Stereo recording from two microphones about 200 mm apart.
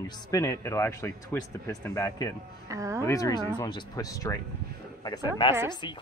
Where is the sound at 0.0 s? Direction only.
20° left (ahead or behind).